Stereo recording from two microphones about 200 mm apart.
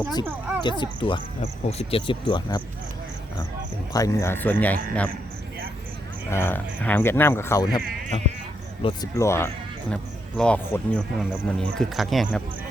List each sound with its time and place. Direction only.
0.3 s a sound: 10° right (ahead or behind)
0.6 s speech: 25° left (ahead or behind)
3.9 s speech: 15° left (ahead or behind)
6.3 s speech: 10° left (ahead or behind)
8.1 s speech: 25° left (ahead or behind)
9.1 s speech: 15° left (ahead or behind)